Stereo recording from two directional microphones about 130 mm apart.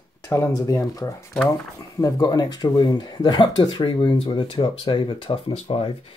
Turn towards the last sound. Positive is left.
turn(degrees=45)  # may be behind; listen again after turning